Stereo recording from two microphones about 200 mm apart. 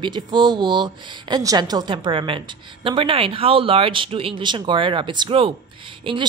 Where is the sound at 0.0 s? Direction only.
20° right (ahead or behind).